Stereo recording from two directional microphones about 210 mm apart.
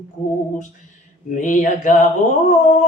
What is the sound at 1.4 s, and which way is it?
Speech, 35° left (ahead or behind).